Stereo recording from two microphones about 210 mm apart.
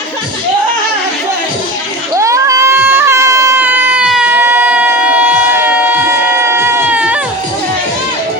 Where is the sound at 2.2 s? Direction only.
15° right (ahead or behind).